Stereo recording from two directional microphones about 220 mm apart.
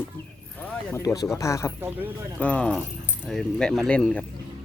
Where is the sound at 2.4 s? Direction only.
5° left (ahead or behind).